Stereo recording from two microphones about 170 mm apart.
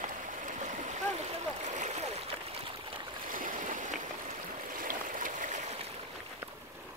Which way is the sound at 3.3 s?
55° right (ahead or behind).